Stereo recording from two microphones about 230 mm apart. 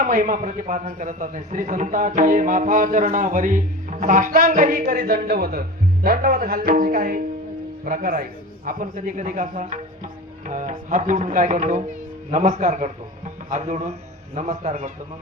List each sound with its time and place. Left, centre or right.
0.0 s a man's voice: right